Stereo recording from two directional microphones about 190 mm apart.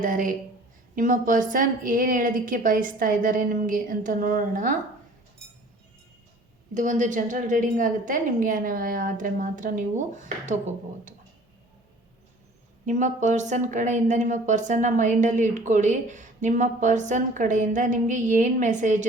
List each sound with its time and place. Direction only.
0.0 s a woman's voice: 45° right (ahead or behind)
6.7 s a woman's voice: 40° right (ahead or behind)
12.8 s speech: 40° right (ahead or behind)